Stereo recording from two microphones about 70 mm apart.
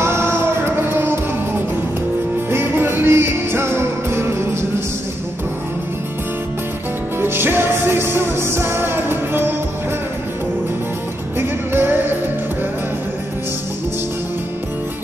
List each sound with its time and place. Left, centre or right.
0.0 s music: right
7.2 s music: right
11.3 s music: right